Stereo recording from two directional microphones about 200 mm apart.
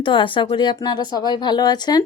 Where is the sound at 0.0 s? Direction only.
25° left (ahead or behind).